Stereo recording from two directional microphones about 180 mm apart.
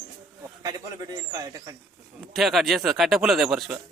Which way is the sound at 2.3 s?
Centre (ahead or behind).